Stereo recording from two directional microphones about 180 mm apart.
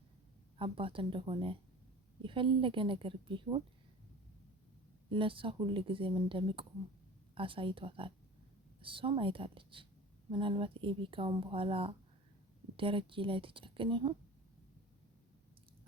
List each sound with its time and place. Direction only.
0.6 s speech: 30° right (ahead or behind)
5.0 s speech: 30° right (ahead or behind)